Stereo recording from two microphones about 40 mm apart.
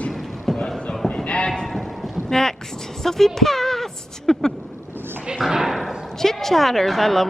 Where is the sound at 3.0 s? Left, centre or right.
Centre.